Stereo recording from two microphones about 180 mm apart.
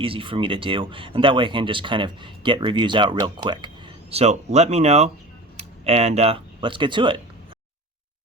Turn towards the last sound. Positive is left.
turn(degrees=-25)  # may be behind; listen again after turning